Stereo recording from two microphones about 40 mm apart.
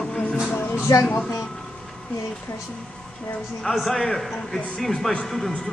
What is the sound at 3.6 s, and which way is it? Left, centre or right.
A man's voice, centre.